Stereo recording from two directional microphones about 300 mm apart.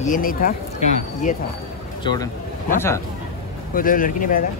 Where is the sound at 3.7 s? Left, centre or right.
Left.